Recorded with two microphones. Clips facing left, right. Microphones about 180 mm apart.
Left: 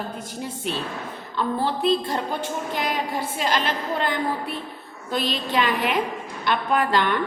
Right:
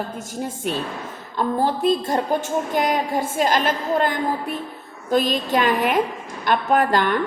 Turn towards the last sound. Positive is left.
turn(degrees=-45)  # may be behind; listen again after turning